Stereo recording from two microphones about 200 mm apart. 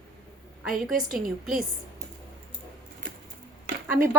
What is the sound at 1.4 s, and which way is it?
Speech, centre (ahead or behind).